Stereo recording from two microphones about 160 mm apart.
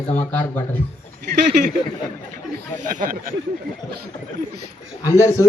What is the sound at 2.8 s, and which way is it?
Speech, 50° right (ahead or behind).